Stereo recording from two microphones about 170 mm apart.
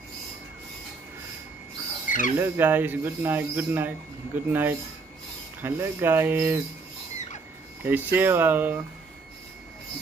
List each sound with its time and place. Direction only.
2.0 s bird: 50° left (ahead or behind)
2.3 s speech: 15° right (ahead or behind)
7.8 s speech: 10° right (ahead or behind)